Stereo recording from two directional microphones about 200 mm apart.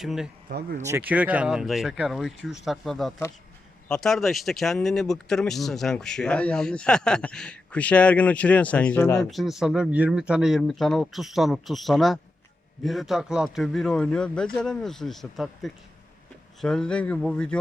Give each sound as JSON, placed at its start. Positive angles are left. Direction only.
{"t": 0.0, "sound": "speech", "side_deg": 0}
{"t": 0.4, "sound": "speech", "side_deg": -50}
{"t": 0.9, "sound": "speech", "side_deg": -10}
{"t": 9.3, "sound": "speech", "side_deg": 0}